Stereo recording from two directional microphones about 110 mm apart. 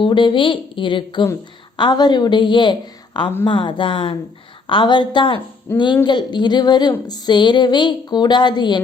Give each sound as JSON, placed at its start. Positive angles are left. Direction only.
{"t": 0.0, "sound": "a woman's voice", "side_deg": 45}